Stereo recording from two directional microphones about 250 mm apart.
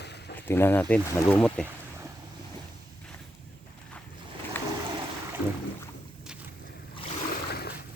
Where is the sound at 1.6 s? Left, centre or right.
Centre.